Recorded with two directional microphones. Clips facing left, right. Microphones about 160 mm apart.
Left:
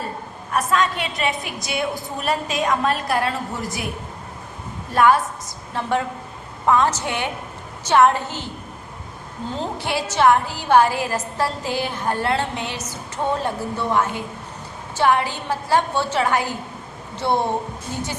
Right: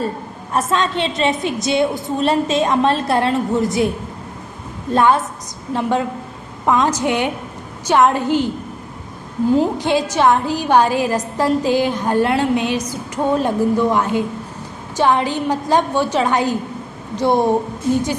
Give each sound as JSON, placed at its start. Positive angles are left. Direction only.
{"t": 0.5, "sound": "a woman's voice", "side_deg": -25}
{"t": 4.9, "sound": "a woman's voice", "side_deg": -25}
{"t": 9.6, "sound": "a woman's voice", "side_deg": -15}